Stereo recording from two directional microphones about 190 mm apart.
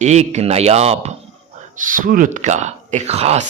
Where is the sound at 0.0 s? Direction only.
35° right (ahead or behind).